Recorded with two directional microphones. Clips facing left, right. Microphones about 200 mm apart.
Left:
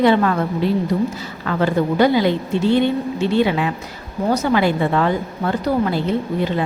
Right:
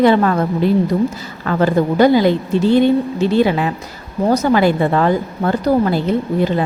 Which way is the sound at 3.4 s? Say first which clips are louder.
Right 3 dB; 40° right (ahead or behind).